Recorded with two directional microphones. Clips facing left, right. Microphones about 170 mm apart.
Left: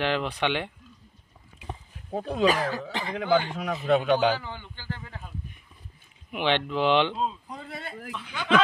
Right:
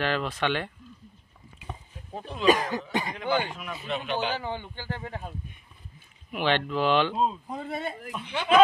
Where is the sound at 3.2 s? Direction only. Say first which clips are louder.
Left 8 dB; 90° left.